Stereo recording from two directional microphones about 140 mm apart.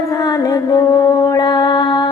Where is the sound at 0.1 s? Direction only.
25° left (ahead or behind).